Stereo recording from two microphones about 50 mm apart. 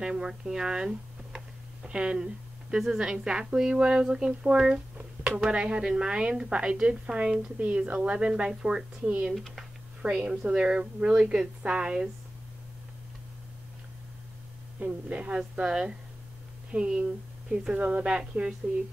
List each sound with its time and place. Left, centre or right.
0.0 s a woman's voice: centre
9.3 s speech: centre
10.0 s a woman's voice: centre
14.8 s a woman's voice: right